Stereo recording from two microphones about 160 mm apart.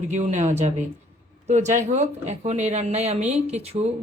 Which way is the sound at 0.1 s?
45° right (ahead or behind).